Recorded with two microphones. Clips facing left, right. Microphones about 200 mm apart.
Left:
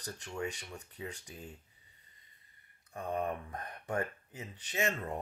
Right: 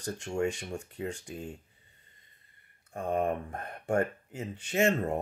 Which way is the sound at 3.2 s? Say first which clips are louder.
Right 6 dB; 30° right (ahead or behind).